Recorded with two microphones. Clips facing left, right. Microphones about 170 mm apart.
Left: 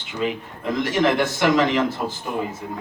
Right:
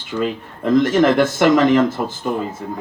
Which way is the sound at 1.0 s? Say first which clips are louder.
Right 5 dB; 50° right (ahead or behind).